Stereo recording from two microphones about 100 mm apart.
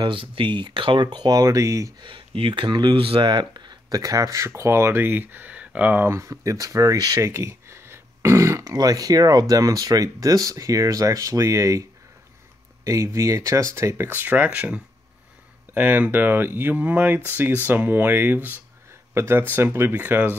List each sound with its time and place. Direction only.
0.0 s speech: 55° right (ahead or behind); by 2.0 s 30° right (ahead or behind)
2.0 s speech: 55° right (ahead or behind); by 6.0 s 15° right (ahead or behind)
6.0 s speech: 30° right (ahead or behind)
7.2 s throat clearing: 25° right (ahead or behind)
8.7 s speech: 40° right (ahead or behind)
12.8 s speech: 30° right (ahead or behind)